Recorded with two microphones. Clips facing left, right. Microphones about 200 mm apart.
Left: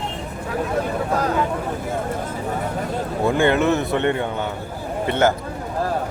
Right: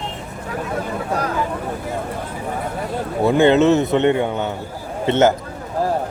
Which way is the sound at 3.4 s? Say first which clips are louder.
Right 6 dB; 20° right (ahead or behind).